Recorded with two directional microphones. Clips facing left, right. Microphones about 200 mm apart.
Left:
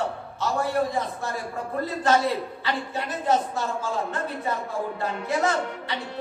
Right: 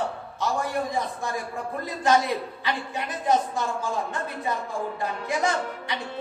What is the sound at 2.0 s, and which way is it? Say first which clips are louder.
Speech: right 1 dB; 15° right (ahead or behind).